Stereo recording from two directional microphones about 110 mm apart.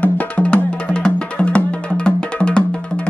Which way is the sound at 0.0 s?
15° left (ahead or behind).